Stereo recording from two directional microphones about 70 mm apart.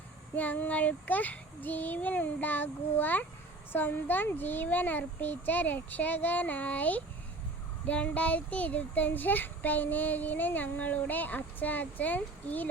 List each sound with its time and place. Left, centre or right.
0.3 s speech: left